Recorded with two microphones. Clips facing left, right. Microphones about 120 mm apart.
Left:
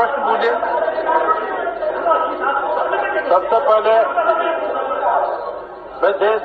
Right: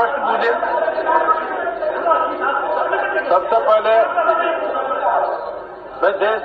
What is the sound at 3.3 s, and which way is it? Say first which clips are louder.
Speech: left 1 dB; 15° left (ahead or behind).